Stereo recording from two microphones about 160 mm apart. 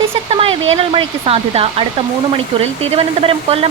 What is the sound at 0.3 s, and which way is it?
Speech, 35° right (ahead or behind).